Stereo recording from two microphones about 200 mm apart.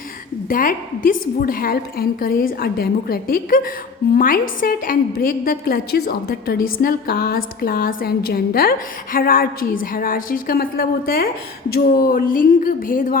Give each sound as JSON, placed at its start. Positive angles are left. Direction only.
{"t": 0.4, "sound": "a woman's voice", "side_deg": 45}